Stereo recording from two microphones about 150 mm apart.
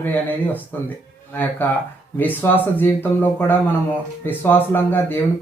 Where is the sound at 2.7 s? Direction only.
15° left (ahead or behind).